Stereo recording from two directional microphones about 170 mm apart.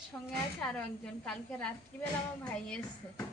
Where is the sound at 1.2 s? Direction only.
5° left (ahead or behind).